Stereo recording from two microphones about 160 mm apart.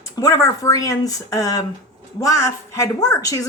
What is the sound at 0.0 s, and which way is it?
A woman's voice, 20° left (ahead or behind).